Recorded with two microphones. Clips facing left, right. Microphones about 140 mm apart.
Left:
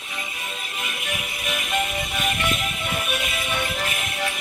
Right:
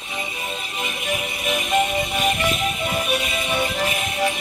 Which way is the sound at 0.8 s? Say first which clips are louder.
Right 6 dB; centre (ahead or behind).